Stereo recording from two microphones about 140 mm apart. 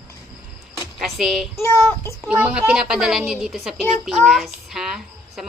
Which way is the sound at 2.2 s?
5° right (ahead or behind).